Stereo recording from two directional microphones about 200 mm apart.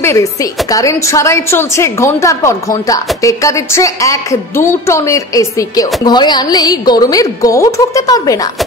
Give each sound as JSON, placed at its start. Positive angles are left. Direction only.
{"t": 0.0, "sound": "a woman's voice", "side_deg": 15}